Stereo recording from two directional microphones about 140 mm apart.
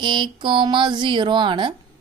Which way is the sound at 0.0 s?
35° right (ahead or behind).